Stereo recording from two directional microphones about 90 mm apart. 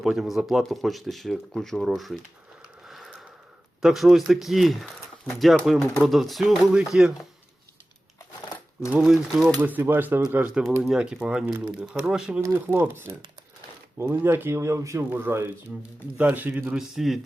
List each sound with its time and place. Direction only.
0.0 s speech: 5° right (ahead or behind)
8.9 s speech: 5° right (ahead or behind)
9.6 s speech: 20° right (ahead or behind)
12.4 s speech: 25° right (ahead or behind)
16.7 s speech: 5° right (ahead or behind)